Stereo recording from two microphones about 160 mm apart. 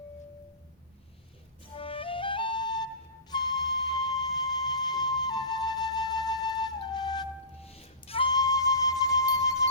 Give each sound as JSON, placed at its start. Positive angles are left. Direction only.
{"t": 1.7, "sound": "flute", "side_deg": 35}
{"t": 7.6, "sound": "flute", "side_deg": 40}